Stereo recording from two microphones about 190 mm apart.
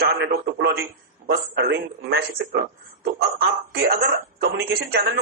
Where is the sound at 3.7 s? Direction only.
55° right (ahead or behind).